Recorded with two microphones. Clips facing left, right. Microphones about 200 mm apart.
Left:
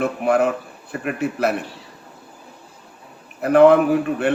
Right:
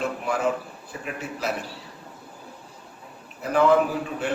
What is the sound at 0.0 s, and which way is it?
A man's voice, 65° left (ahead or behind).